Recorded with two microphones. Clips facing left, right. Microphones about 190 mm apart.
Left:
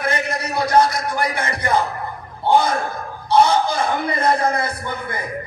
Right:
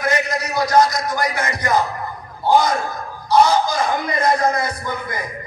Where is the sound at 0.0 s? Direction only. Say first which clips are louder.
Right 2 dB; 30° left (ahead or behind).